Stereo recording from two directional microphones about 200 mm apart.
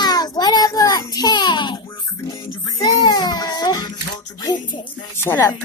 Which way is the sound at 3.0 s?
20° left (ahead or behind).